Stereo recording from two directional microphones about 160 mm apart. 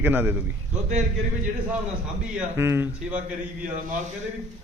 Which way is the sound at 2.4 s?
15° right (ahead or behind).